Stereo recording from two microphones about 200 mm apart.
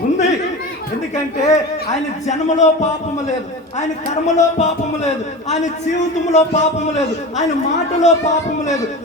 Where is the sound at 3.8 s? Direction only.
35° left (ahead or behind).